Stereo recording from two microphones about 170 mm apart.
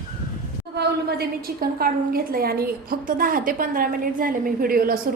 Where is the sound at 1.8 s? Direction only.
60° right (ahead or behind).